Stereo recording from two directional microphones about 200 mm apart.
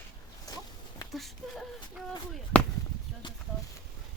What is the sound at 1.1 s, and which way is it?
Speech, centre (ahead or behind).